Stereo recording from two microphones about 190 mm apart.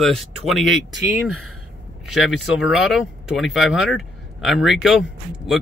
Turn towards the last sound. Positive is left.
turn(degrees=0)  # may be behind; listen again after turning